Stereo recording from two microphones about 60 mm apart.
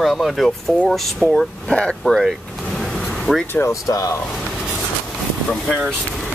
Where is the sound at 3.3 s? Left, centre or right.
Centre.